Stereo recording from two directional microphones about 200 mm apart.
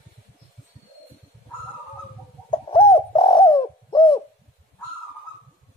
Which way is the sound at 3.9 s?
25° left (ahead or behind).